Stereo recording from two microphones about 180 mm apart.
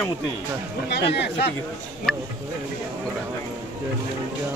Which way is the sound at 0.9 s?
65° left (ahead or behind).